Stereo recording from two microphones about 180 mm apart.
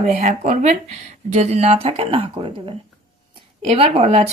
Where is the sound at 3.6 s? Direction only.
35° right (ahead or behind).